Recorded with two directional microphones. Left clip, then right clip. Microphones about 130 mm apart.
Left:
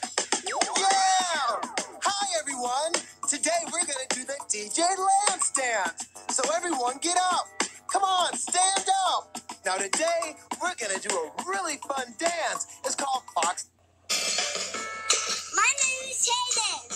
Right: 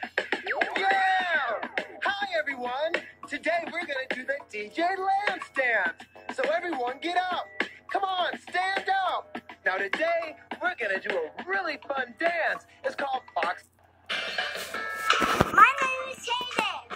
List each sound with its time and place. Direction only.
0.0 s music: 45° left (ahead or behind)
14.1 s music: 60° left (ahead or behind)